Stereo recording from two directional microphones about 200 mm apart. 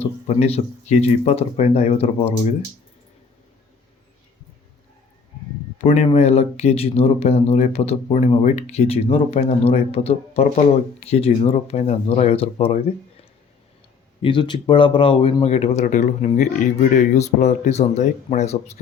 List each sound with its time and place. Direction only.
0.0 s speech: 30° left (ahead or behind)
5.8 s speech: 30° left (ahead or behind)
14.2 s speech: 25° left (ahead or behind)